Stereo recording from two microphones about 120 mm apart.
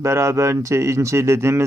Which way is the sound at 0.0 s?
25° right (ahead or behind).